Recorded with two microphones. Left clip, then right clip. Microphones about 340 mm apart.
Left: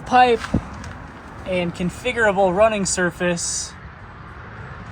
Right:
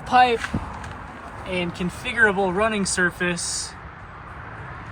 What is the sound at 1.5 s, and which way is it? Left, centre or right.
Speech, left.